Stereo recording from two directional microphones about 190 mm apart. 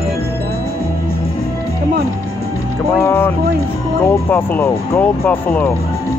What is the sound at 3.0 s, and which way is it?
Speech, 10° left (ahead or behind).